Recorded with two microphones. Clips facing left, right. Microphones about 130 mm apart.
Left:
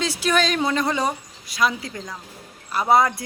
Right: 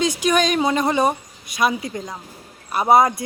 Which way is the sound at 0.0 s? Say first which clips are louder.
Right 3 dB; 15° right (ahead or behind).